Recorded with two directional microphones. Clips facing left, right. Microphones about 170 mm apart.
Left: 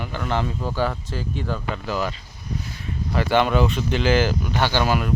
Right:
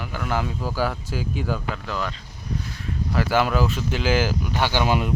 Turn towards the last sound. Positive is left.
turn(degrees=-20)  # may be behind; listen again after turning